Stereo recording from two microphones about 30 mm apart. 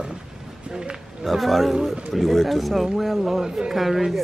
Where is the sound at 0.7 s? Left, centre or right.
Right.